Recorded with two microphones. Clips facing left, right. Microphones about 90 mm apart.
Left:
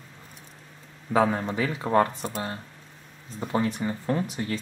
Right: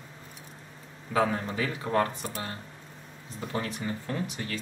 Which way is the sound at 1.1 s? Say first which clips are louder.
Left 4 dB; 25° left (ahead or behind).